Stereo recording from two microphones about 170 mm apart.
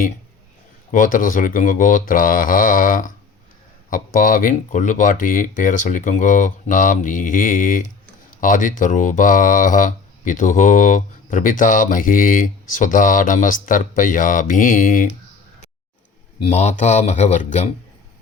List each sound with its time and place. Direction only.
0.9 s speech: 50° left (ahead or behind)
16.4 s speech: 40° left (ahead or behind)